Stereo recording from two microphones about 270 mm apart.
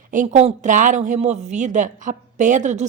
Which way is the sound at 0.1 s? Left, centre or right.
Right.